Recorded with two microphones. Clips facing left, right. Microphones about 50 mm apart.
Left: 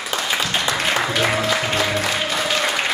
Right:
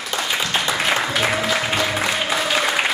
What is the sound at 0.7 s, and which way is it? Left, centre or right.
Music, centre.